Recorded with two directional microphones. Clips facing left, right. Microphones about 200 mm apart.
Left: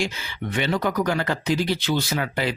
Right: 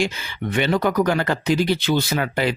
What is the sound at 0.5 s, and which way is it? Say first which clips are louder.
Speech: right 4 dB; 60° right (ahead or behind).